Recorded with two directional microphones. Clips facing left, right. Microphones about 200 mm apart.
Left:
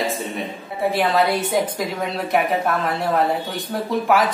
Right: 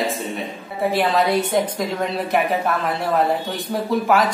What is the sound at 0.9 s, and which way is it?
A man's voice, centre (ahead or behind).